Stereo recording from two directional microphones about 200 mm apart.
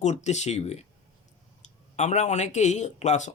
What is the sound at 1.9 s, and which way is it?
Speech, 35° left (ahead or behind).